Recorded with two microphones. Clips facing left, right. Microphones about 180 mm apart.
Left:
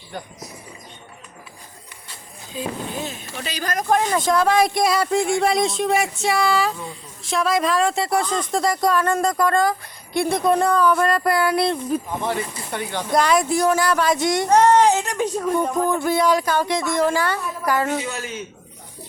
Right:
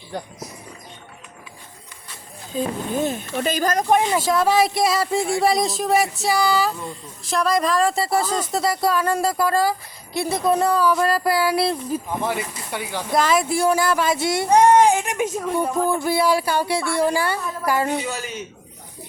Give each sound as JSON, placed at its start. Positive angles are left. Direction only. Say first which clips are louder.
{"t": 2.6, "sound": "speech", "louder": "right 5 dB", "side_deg": -50}
{"t": 3.8, "sound": "speech", "louder": "even", "side_deg": -20}
{"t": 4.1, "sound": "speech", "louder": "even", "side_deg": -5}
{"t": 15.4, "sound": "speech", "louder": "left 2 dB", "side_deg": -5}